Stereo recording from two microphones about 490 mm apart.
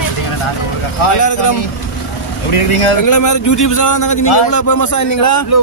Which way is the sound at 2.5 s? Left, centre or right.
Left.